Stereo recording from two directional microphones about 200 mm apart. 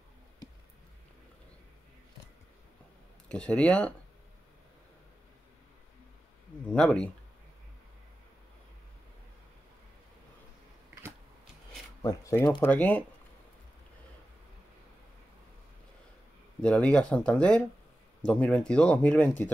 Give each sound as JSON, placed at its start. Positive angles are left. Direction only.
{"t": 0.4, "sound": "a sound", "side_deg": 20}
{"t": 3.3, "sound": "speech", "side_deg": 5}
{"t": 6.7, "sound": "speech", "side_deg": 5}
{"t": 12.0, "sound": "speech", "side_deg": 15}
{"t": 12.6, "sound": "speech", "side_deg": 10}
{"t": 16.6, "sound": "speech", "side_deg": 5}